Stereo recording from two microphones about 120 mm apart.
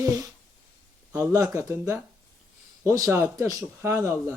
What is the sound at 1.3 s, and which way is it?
Speech, 30° right (ahead or behind).